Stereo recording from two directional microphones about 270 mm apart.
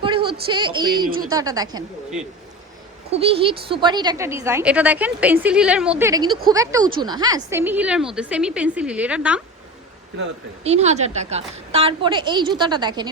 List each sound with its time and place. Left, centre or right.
0.0 s a sound: centre
0.5 s a woman's voice: centre
3.1 s a woman's voice: right; by 9.4 s centre
10.6 s a woman's voice: right